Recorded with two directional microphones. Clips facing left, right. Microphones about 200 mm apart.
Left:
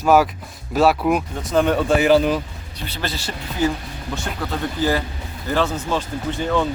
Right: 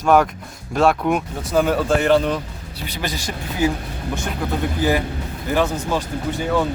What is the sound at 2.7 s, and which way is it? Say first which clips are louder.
Speech: right 1 dB; 15° right (ahead or behind).